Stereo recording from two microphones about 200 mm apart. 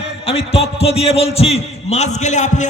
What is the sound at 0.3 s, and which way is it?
A man's voice, 30° left (ahead or behind).